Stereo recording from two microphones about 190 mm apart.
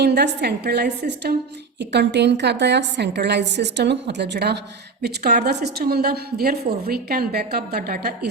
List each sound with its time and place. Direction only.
0.0 s a woman's voice: 60° right (ahead or behind)